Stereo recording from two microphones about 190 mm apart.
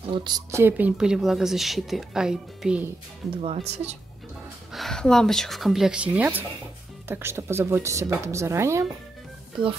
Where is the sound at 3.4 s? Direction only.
30° right (ahead or behind).